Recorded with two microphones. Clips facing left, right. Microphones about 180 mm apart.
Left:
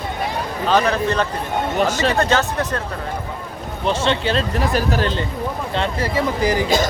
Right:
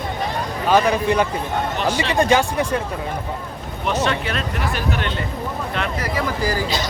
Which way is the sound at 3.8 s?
30° left (ahead or behind).